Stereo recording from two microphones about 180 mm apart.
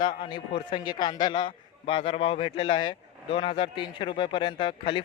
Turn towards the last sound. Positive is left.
turn(degrees=30)  # may be behind; listen again after turning